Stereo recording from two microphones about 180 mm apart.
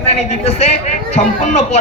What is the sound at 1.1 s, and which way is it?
Speech, 40° left (ahead or behind).